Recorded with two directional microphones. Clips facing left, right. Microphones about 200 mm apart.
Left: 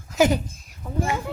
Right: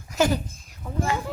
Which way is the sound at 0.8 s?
5° left (ahead or behind).